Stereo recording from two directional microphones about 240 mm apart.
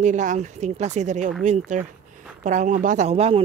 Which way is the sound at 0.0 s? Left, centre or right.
Right.